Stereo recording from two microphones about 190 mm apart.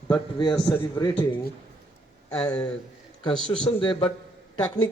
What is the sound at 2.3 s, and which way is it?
Speech, 5° left (ahead or behind).